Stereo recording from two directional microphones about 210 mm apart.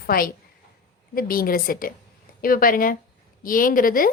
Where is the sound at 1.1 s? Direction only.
45° left (ahead or behind).